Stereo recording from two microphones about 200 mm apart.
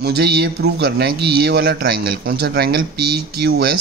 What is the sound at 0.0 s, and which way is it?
A man's voice, 55° right (ahead or behind).